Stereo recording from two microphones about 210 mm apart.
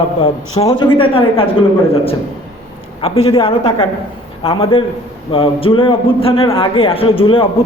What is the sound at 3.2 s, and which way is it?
A man's voice, 25° left (ahead or behind).